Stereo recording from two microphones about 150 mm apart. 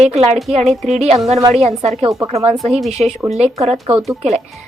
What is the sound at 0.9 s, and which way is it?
A woman's voice, 45° right (ahead or behind).